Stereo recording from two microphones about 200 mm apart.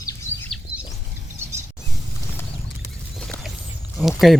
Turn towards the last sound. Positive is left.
turn(degrees=0)  # may be behind; listen again after turning